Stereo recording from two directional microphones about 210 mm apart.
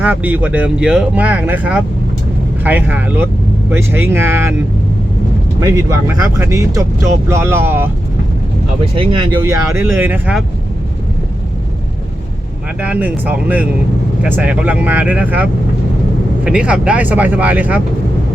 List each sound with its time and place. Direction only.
0.0 s speech: 5° right (ahead or behind)
5.5 s speech: 15° right (ahead or behind)
8.8 s speech: 25° right (ahead or behind); by 10.4 s 5° right (ahead or behind)
12.8 s speech: 5° right (ahead or behind)